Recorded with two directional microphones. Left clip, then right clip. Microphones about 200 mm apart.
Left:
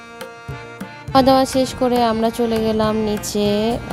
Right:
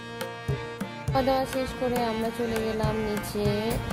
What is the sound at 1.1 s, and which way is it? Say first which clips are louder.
Speech: left 11 dB; 45° left (ahead or behind).